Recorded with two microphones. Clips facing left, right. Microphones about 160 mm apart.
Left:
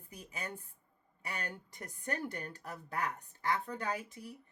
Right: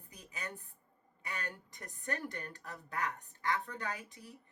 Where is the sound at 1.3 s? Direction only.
30° left (ahead or behind).